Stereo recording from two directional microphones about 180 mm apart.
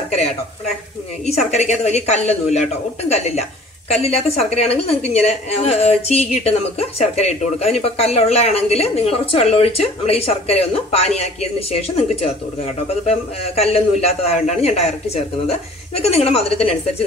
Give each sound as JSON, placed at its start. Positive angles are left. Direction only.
{"t": 1.3, "sound": "a woman's voice", "side_deg": 40}